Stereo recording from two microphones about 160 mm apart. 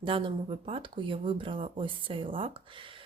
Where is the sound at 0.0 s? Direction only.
30° right (ahead or behind).